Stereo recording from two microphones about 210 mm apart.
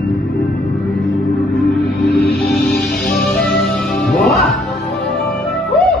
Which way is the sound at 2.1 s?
50° left (ahead or behind).